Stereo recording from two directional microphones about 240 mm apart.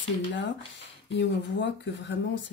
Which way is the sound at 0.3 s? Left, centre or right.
Left.